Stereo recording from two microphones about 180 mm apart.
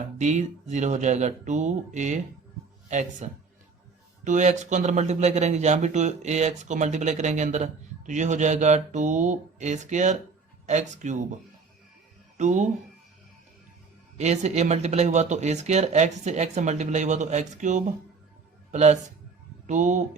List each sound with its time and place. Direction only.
0.2 s speech: 40° right (ahead or behind)
12.4 s speech: 40° right (ahead or behind)
14.2 s speech: 40° right (ahead or behind)